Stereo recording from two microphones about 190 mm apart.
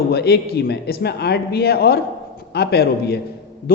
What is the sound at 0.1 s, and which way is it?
A man's voice, 60° left (ahead or behind).